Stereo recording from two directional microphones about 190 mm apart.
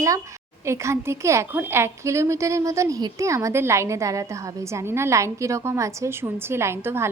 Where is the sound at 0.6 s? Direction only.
15° right (ahead or behind).